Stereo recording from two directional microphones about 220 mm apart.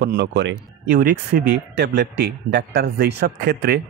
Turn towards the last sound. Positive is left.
turn(degrees=-50)  # may be behind; listen again after turning